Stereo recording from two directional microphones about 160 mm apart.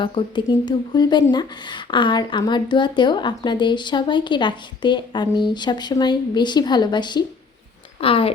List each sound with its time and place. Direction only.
0.0 s speech: 30° left (ahead or behind)